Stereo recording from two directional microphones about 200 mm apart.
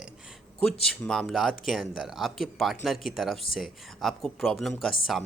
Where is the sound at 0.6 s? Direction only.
5° left (ahead or behind).